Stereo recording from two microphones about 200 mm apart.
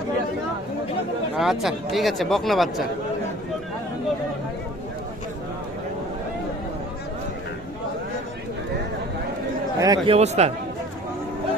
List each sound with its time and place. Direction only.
1.4 s speech: centre (ahead or behind)
9.8 s speech: 20° right (ahead or behind)
10.1 s speech: 35° right (ahead or behind)